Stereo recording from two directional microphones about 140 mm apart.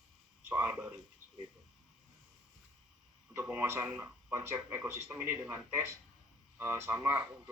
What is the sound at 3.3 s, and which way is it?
A man's voice, 15° right (ahead or behind).